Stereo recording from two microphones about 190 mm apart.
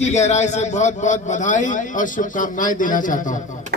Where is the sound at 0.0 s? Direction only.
35° left (ahead or behind).